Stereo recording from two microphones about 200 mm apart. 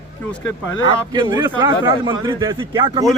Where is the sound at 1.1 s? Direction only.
20° right (ahead or behind).